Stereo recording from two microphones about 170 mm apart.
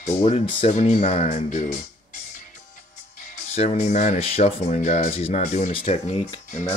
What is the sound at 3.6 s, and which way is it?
Speech, 40° left (ahead or behind).